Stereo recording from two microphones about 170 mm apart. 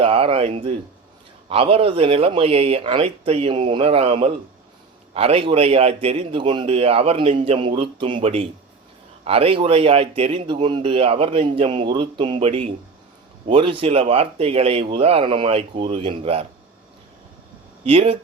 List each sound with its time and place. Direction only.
0.0 s speech: 35° right (ahead or behind)
17.8 s speech: 35° right (ahead or behind)